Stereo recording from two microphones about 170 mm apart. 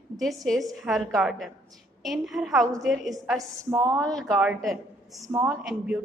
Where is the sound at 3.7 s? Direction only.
20° right (ahead or behind).